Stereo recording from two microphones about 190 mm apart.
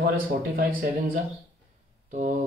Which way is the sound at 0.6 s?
50° right (ahead or behind).